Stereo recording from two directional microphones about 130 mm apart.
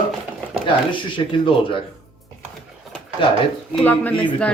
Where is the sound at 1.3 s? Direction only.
40° left (ahead or behind).